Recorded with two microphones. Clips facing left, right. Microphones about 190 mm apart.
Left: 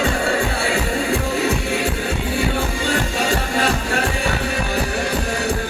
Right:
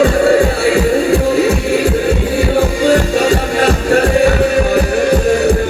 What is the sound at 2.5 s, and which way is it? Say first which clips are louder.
Music: right 10 dB; 40° right (ahead or behind).